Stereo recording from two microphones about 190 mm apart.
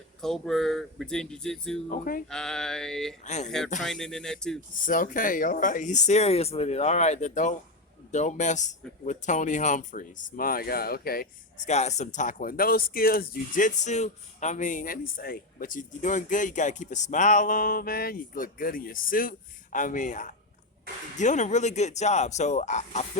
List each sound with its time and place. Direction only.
0.2 s speech: centre (ahead or behind)
1.9 s speech: 50° left (ahead or behind)
2.3 s speech: 5° left (ahead or behind)
3.2 s speech: 35° left (ahead or behind)
3.8 s speech: 5° left (ahead or behind)
4.9 s speech: 45° left (ahead or behind)
11.7 s speech: 35° left (ahead or behind)